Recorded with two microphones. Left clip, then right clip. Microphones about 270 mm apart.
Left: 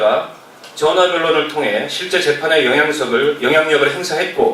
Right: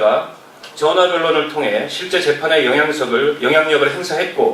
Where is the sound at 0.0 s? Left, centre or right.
Centre.